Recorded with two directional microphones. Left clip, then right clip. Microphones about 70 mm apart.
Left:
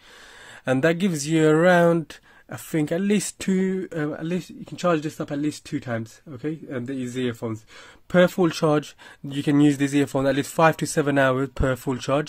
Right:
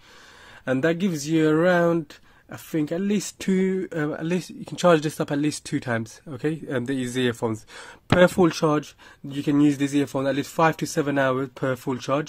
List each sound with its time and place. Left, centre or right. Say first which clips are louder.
0.7 s speech: left 2 dB; left
3.3 s speech: right 1 dB; centre
4.1 s speech: right 2 dB; right
4.6 s speech: right 4 dB; right
7.0 s speech: right 2 dB; right
8.2 s speech: right 1 dB; right
8.5 s speech: left 1 dB; centre
9.3 s speech: left 1 dB; left